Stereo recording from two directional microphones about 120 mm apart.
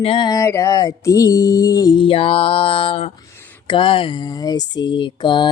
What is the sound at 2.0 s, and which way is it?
Mantra, 50° left (ahead or behind).